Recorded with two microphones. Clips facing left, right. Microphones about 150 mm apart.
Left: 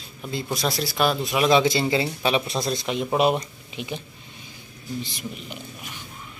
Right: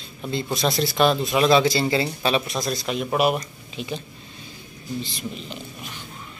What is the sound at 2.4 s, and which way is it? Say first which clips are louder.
Speech: even; 25° left (ahead or behind).